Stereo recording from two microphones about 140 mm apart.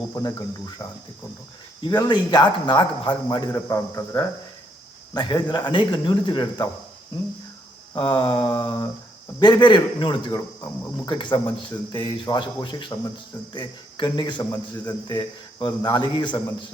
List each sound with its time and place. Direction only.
0.1 s a man's voice: 25° left (ahead or behind)
5.1 s a man's voice: 35° left (ahead or behind)
7.9 s a man's voice: 35° left (ahead or behind)